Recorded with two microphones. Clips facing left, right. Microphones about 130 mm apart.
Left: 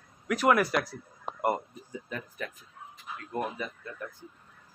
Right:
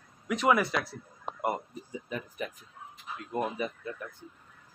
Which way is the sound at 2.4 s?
15° right (ahead or behind).